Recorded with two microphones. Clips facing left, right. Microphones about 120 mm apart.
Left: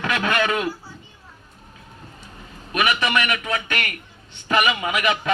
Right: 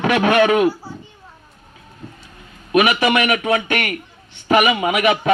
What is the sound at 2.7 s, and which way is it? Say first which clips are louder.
A man's voice: right 6 dB; 30° right (ahead or behind).